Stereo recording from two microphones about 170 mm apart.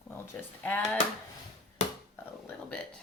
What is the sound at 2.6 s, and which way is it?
Speech, 5° left (ahead or behind).